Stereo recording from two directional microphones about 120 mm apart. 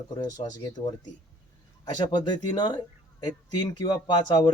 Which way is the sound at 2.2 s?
35° left (ahead or behind).